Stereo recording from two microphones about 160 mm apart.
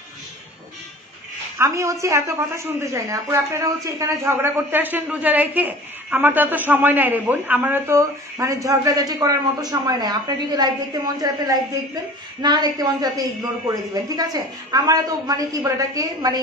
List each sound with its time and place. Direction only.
1.6 s a man's voice: 20° right (ahead or behind)